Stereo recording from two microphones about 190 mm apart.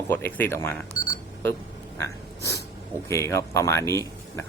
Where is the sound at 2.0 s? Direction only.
15° left (ahead or behind).